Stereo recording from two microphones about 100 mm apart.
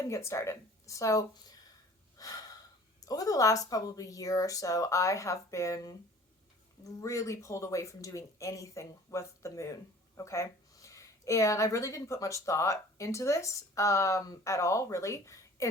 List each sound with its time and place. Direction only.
0.1 s a woman's voice: 30° left (ahead or behind)
2.1 s gasp: 35° left (ahead or behind)
3.0 s a woman's voice: 35° left (ahead or behind)
7.0 s a woman's voice: 30° left (ahead or behind)